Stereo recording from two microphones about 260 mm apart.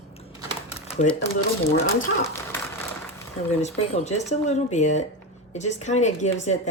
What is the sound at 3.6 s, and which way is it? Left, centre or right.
A woman's voice, left.